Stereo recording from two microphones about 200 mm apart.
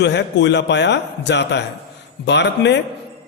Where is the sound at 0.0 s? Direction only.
60° left (ahead or behind).